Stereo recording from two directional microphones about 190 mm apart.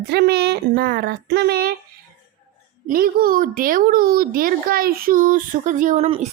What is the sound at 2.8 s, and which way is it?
A woman's voice, 50° right (ahead or behind).